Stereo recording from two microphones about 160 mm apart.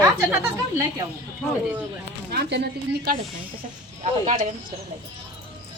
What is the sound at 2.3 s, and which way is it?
Speech, 85° right.